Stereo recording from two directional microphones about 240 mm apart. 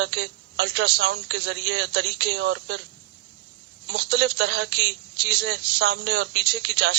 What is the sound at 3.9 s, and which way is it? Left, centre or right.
Speech, right.